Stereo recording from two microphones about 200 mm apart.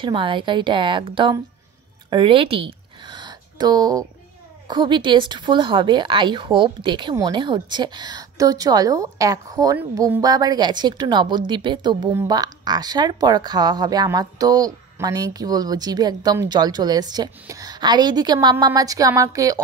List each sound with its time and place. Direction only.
0.0 s speech: 25° right (ahead or behind)
2.0 s a sound: 25° right (ahead or behind)
4.6 s speech: 25° right (ahead or behind)